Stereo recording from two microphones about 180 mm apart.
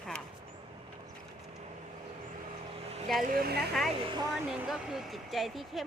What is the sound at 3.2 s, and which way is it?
Speech, 55° right (ahead or behind).